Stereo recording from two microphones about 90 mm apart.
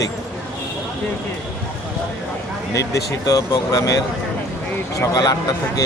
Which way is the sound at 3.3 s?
40° left (ahead or behind).